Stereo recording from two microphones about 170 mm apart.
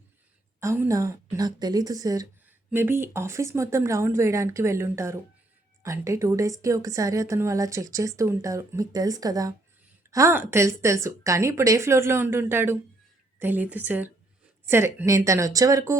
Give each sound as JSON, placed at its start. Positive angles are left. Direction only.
{"t": 0.6, "sound": "a woman's voice", "side_deg": -15}